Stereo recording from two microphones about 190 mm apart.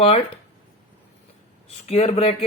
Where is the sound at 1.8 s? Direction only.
30° left (ahead or behind).